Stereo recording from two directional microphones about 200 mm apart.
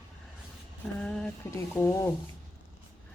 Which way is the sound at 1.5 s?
15° left (ahead or behind).